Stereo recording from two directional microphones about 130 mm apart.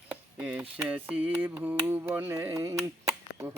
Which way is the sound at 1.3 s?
15° right (ahead or behind).